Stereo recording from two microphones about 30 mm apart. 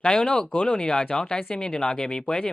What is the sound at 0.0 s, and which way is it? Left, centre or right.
Speech, left.